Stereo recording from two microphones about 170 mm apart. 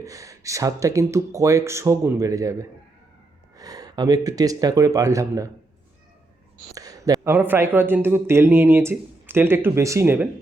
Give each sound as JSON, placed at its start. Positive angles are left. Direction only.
{"t": 0.0, "sound": "speech", "side_deg": -20}
{"t": 6.7, "sound": "speech", "side_deg": -20}